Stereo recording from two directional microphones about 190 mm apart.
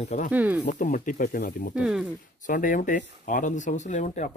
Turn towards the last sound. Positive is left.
turn(degrees=40)  # may be behind; listen again after turning